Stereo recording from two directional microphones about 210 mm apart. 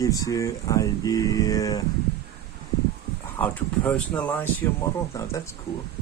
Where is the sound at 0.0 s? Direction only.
15° left (ahead or behind).